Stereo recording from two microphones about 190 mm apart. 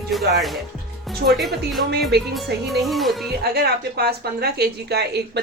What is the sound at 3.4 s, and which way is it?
Speech, 55° right (ahead or behind).